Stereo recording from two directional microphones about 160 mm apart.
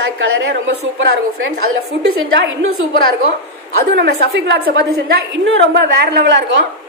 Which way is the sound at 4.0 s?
90° right.